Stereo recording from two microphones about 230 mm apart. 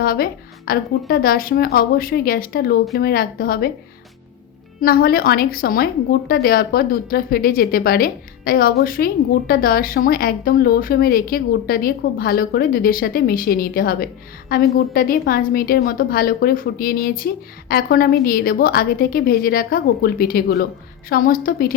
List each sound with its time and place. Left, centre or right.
0.0 s a woman's voice: left
4.8 s a woman's voice: left